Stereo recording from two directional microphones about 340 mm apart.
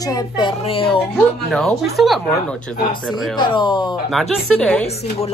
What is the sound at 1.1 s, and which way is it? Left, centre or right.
Speech, centre.